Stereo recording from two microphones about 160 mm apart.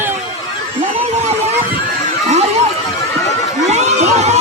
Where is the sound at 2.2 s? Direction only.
45° right (ahead or behind).